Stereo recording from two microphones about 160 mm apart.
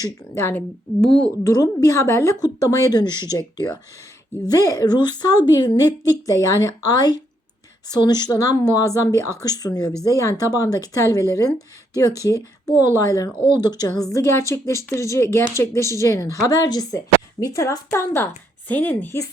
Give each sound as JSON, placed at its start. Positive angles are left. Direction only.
{"t": 0.0, "sound": "speech", "side_deg": 15}
{"t": 1.0, "sound": "a woman's voice", "side_deg": 5}
{"t": 1.5, "sound": "a woman's voice", "side_deg": 20}